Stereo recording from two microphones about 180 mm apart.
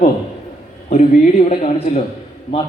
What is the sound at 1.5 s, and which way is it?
Speech, 35° left (ahead or behind).